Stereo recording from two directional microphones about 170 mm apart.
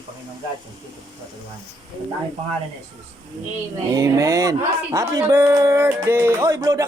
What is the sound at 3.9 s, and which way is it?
A man's voice, 20° right (ahead or behind).